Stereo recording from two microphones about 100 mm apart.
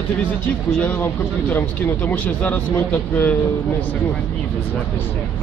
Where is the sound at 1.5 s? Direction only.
15° left (ahead or behind).